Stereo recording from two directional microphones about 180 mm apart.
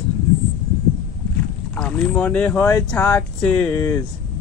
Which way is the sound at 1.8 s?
5° left (ahead or behind).